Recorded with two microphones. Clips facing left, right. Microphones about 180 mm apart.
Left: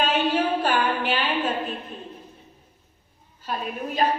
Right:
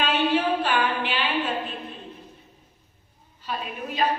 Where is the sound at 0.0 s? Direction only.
45° left (ahead or behind).